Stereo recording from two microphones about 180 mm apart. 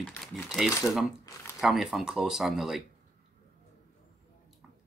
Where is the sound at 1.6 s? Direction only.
Centre (ahead or behind).